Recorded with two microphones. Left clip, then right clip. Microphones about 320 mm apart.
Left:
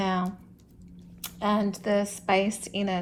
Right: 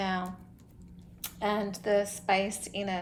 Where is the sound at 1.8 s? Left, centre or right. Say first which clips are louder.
Left 1 dB; centre.